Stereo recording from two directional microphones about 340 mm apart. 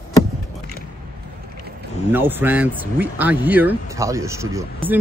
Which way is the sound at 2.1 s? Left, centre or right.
Centre.